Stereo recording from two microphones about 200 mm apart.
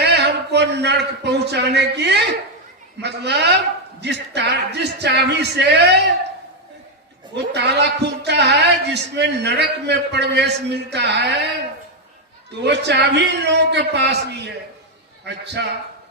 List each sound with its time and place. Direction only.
0.0 s a man's voice: 55° right (ahead or behind)
7.3 s speech: 55° right (ahead or behind)
12.6 s a man's voice: 60° right (ahead or behind)